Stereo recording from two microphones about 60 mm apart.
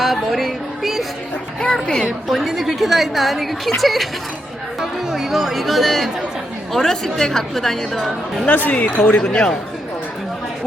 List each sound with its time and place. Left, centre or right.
0.0 s a woman's voice: centre
1.6 s speech: centre
2.0 s a woman's voice: centre
8.4 s speech: left